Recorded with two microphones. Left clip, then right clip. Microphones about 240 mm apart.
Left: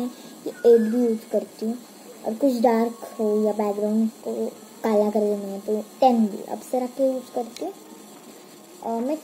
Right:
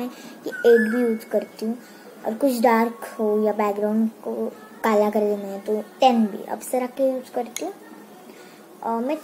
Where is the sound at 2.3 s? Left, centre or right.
Centre.